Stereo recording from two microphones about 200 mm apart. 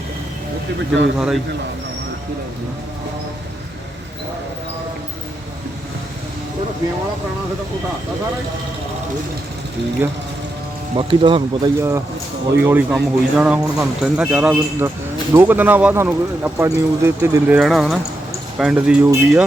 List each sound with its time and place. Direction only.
10.9 s speech: 25° right (ahead or behind)
11.8 s speech: 15° right (ahead or behind)
17.6 s speech: centre (ahead or behind)